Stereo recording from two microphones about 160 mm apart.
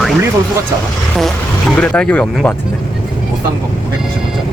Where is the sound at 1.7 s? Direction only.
10° left (ahead or behind).